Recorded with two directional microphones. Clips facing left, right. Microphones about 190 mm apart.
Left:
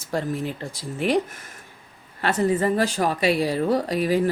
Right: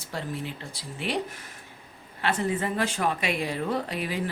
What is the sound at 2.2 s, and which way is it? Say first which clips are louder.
Speech: left 6 dB; 40° left (ahead or behind).